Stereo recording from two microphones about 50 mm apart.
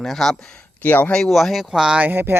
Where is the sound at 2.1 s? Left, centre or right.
Right.